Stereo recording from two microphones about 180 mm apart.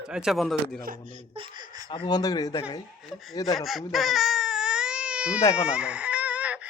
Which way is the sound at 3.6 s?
Centre (ahead or behind).